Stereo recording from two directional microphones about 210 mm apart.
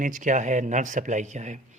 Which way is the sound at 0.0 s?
40° right (ahead or behind).